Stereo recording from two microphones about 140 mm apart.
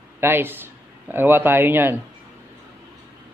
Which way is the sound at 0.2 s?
15° right (ahead or behind).